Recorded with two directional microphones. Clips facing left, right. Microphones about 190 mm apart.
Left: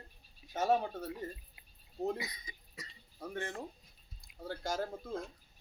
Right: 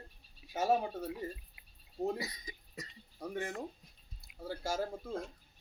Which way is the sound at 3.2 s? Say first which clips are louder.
Right 2 dB; 10° right (ahead or behind).